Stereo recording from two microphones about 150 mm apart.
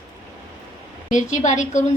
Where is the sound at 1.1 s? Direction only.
55° left (ahead or behind).